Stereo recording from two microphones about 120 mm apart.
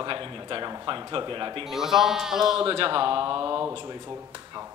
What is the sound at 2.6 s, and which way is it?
Speech, 45° right (ahead or behind).